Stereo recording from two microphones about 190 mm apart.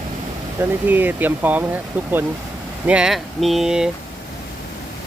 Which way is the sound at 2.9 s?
5° right (ahead or behind).